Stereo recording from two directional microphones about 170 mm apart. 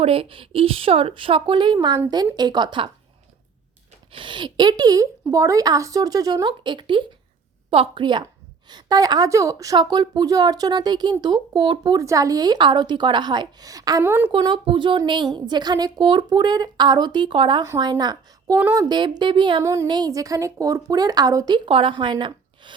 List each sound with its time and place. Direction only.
0.0 s a woman's voice: 35° right (ahead or behind)
4.1 s a woman's voice: 30° right (ahead or behind); by 14.3 s 10° right (ahead or behind)
14.3 s a woman's voice: 30° right (ahead or behind)
19.6 s a woman's voice: 15° right (ahead or behind)